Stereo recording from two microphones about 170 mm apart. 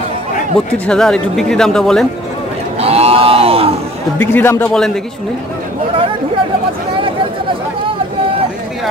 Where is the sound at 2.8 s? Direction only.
35° right (ahead or behind).